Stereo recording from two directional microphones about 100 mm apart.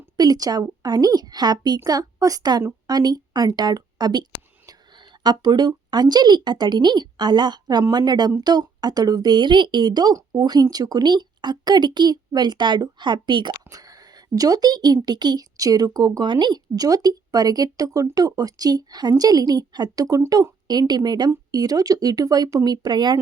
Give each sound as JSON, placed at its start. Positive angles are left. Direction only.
{"t": 0.2, "sound": "a woman's voice", "side_deg": -40}
{"t": 14.3, "sound": "a woman's voice", "side_deg": -40}